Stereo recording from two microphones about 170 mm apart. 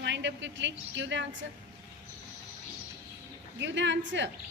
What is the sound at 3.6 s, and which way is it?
Speech, 90° right.